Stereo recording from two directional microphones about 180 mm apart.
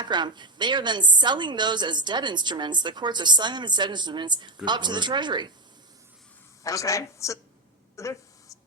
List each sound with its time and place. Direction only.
0.0 s a woman's voice: 25° right (ahead or behind)
6.6 s a woman's voice: 20° left (ahead or behind)
7.9 s a sound: 15° left (ahead or behind)